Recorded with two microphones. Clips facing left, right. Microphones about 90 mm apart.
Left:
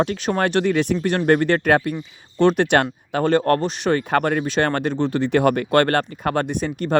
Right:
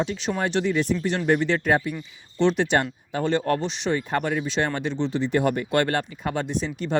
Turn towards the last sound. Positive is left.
turn(degrees=55)  # may be behind; listen again after turning